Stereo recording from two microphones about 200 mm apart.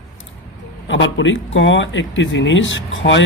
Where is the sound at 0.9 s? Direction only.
70° left (ahead or behind).